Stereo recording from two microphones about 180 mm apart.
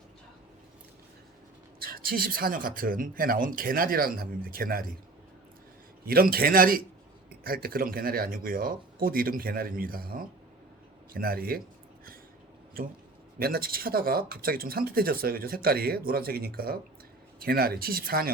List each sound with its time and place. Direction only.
1.8 s speech: 55° right (ahead or behind)
6.1 s speech: 55° right (ahead or behind)
12.8 s speech: 55° right (ahead or behind)